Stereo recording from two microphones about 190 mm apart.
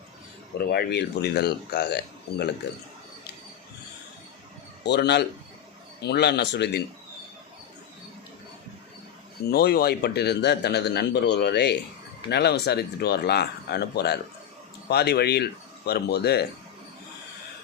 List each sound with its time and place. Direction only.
0.6 s a man's voice: 55° left (ahead or behind)
4.9 s a man's voice: 60° left (ahead or behind)
9.5 s a man's voice: 55° left (ahead or behind)